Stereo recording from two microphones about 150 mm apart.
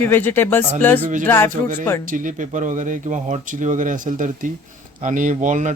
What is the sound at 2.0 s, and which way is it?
Speech, 60° right (ahead or behind).